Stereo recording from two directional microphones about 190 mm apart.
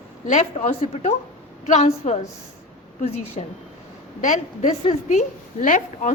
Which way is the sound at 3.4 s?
35° left (ahead or behind).